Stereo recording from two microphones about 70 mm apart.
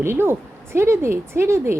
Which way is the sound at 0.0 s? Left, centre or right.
Right.